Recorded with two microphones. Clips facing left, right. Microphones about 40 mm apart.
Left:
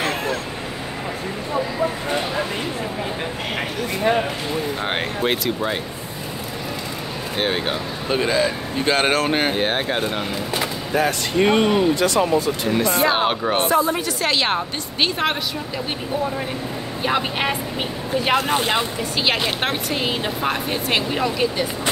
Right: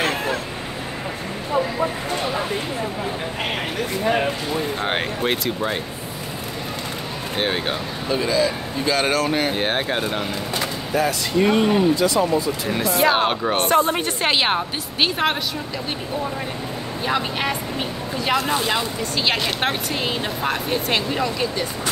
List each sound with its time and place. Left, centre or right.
0.0 s vehicle: centre
4.8 s speech: centre
7.3 s speech: centre
8.1 s speech: left
9.6 s speech: centre
11.4 s speech: left
11.9 s speech: left
12.6 s speech: centre
13.7 s a woman's voice: right
14.2 s speech: right
14.5 s speech: centre
17.0 s speech: centre
19.1 s speech: centre